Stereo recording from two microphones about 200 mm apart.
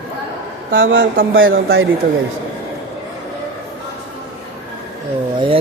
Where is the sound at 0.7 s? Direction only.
70° right (ahead or behind).